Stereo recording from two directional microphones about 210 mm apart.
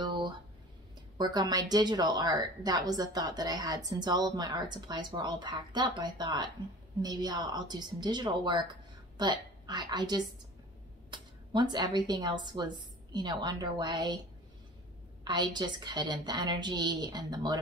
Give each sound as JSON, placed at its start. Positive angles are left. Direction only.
{"t": 0.0, "sound": "a sound", "side_deg": -20}
{"t": 1.1, "sound": "a woman's voice", "side_deg": -20}
{"t": 15.2, "sound": "speech", "side_deg": -20}